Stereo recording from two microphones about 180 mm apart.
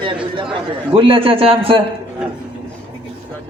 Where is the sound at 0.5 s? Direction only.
30° right (ahead or behind).